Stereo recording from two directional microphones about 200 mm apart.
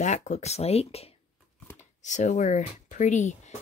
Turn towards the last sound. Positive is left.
turn(degrees=35)  # may be behind; listen again after turning